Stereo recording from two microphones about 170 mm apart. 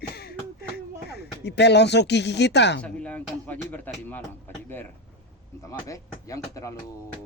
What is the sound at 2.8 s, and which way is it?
Speech, 5° left (ahead or behind).